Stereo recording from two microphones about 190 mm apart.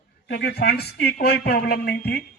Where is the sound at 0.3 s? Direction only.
55° left (ahead or behind).